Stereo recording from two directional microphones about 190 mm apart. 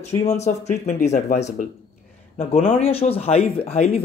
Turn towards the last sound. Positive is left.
turn(degrees=35)  # may be behind; listen again after turning